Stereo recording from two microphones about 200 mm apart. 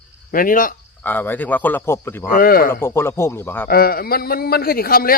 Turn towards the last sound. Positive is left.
turn(degrees=45)  # may be behind; listen again after turning